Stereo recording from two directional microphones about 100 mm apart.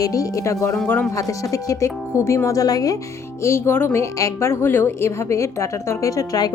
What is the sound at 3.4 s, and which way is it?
A woman's voice, 25° left (ahead or behind).